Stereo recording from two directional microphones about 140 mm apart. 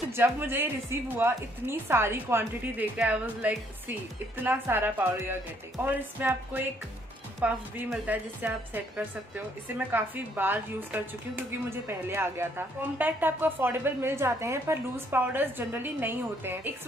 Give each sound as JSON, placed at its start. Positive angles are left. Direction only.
{"t": 0.1, "sound": "a woman's voice", "side_deg": -15}